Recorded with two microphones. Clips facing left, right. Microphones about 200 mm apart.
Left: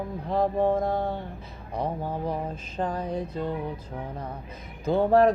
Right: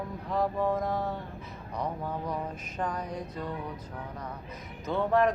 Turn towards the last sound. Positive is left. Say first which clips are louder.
# left 6 dB
turn(degrees=35)  # may be behind; listen again after turning